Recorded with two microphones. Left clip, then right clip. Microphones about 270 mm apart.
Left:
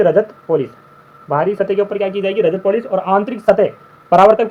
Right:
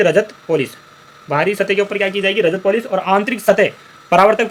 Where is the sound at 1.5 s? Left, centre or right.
Right.